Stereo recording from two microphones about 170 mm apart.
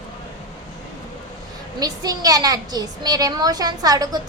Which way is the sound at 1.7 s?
20° right (ahead or behind).